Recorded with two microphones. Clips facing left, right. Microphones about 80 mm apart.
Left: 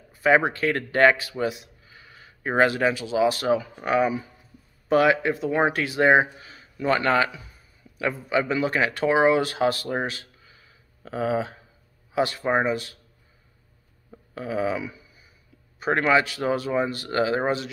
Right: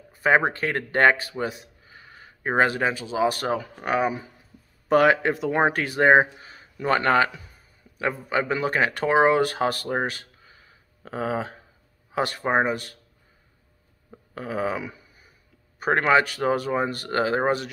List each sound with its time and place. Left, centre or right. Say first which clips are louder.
0.1 s speech: left 1 dB; right
4.0 s speech: left 2 dB; centre
4.8 s a man's voice: right 1 dB; right
9.9 s a sound: right 1 dB; right
11.1 s speech: left 2 dB; right
14.3 s a sound: left 1 dB; right
15.8 s speech: right 1 dB; right